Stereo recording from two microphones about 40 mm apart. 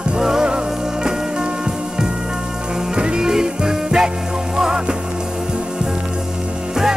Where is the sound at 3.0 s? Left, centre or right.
Right.